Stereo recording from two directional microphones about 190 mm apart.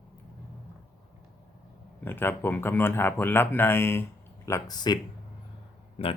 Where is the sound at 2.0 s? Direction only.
10° left (ahead or behind).